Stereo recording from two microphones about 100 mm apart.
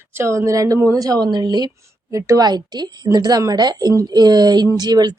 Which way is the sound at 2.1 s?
35° right (ahead or behind).